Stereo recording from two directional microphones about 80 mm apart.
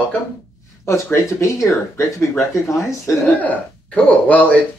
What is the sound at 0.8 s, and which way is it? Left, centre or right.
Speech, left.